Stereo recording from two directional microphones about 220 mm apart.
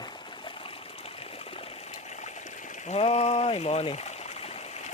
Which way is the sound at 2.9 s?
25° left (ahead or behind).